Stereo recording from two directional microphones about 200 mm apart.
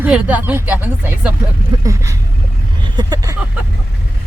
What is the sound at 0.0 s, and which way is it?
Speech, 10° right (ahead or behind).